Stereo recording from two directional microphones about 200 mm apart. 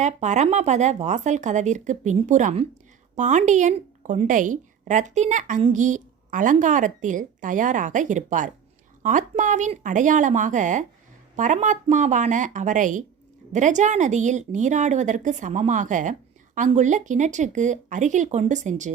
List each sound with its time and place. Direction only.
0.0 s a woman's voice: 35° right (ahead or behind)